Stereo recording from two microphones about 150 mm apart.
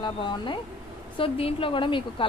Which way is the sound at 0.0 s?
30° left (ahead or behind).